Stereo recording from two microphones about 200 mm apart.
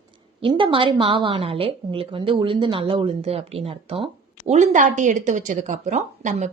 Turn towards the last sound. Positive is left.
turn(degrees=-35)  # may be behind; listen again after turning